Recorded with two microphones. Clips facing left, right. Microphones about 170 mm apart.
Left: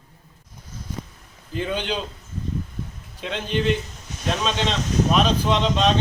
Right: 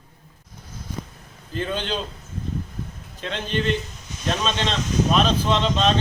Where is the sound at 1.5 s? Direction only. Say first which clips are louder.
Left 1 dB; 15° left (ahead or behind).